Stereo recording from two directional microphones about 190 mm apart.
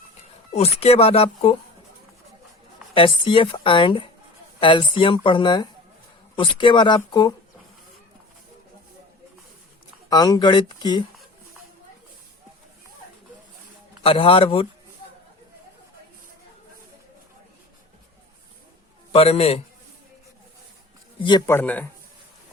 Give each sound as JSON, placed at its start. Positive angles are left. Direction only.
{"t": 0.5, "sound": "speech", "side_deg": 35}
{"t": 2.9, "sound": "a woman's voice", "side_deg": 25}
{"t": 10.1, "sound": "a woman's voice", "side_deg": 20}
{"t": 14.0, "sound": "a woman's voice", "side_deg": 30}
{"t": 19.1, "sound": "speech", "side_deg": 30}
{"t": 21.2, "sound": "speech", "side_deg": 15}